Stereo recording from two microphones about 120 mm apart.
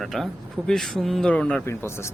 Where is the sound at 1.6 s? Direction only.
20° left (ahead or behind).